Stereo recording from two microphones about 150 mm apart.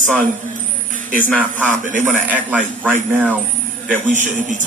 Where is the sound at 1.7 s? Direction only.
60° right (ahead or behind).